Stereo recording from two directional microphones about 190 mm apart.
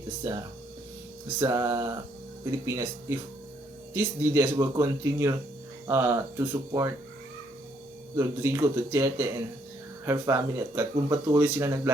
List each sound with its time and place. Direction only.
0.2 s speech: 15° right (ahead or behind)
8.1 s speech: 15° right (ahead or behind)